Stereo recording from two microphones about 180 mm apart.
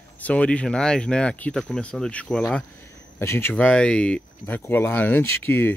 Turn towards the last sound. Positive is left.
turn(degrees=10)  # may be behind; listen again after turning